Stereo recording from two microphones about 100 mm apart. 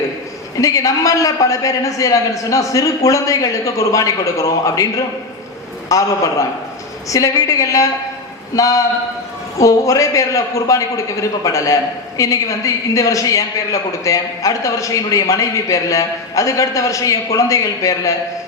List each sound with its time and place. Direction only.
0.6 s a man's voice: 35° left (ahead or behind)
5.9 s a man's voice: 35° left (ahead or behind)
7.1 s a man's voice: 35° left (ahead or behind)